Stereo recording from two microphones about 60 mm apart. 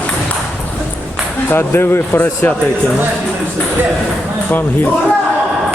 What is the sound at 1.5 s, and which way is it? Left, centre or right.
Speech, left.